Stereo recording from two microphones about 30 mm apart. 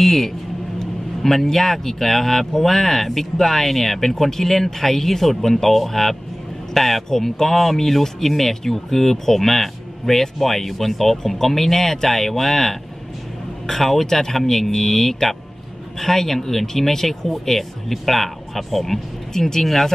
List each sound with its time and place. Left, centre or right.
0.0 s speech: centre
19.6 s speech: centre